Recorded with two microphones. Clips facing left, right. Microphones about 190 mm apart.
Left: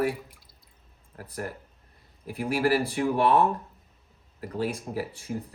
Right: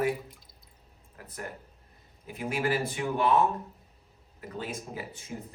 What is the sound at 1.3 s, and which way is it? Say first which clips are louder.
Speech: left 5 dB; 35° left (ahead or behind).